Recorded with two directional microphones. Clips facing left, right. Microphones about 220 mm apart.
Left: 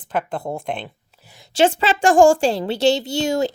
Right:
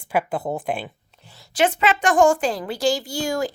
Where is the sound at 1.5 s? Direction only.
30° left (ahead or behind).